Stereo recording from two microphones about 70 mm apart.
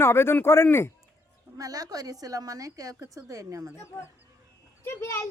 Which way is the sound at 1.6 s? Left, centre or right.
Right.